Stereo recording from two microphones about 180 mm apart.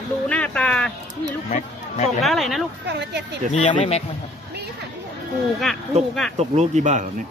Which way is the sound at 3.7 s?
30° left (ahead or behind).